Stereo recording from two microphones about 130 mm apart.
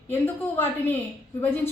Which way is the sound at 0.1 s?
15° left (ahead or behind).